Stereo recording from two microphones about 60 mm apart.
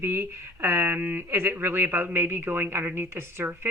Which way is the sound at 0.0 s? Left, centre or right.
Right.